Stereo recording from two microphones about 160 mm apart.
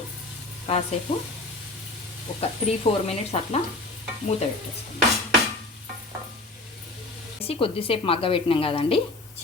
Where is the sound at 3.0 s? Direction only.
40° left (ahead or behind).